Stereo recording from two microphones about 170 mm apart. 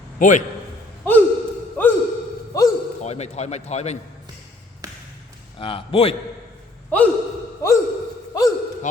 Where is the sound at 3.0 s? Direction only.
40° left (ahead or behind).